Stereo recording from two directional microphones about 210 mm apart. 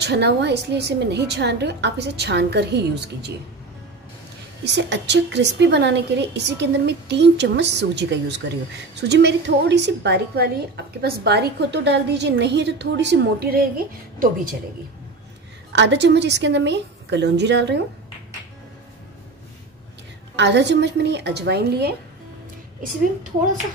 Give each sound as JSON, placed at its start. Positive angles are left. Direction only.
{"t": 0.0, "sound": "a woman's voice", "side_deg": -55}
{"t": 4.6, "sound": "a woman's voice", "side_deg": -55}
{"t": 15.7, "sound": "a woman's voice", "side_deg": -55}
{"t": 20.3, "sound": "a woman's voice", "side_deg": -55}